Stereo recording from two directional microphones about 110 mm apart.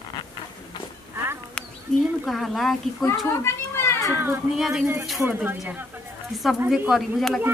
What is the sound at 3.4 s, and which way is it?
Children playing, 20° left (ahead or behind).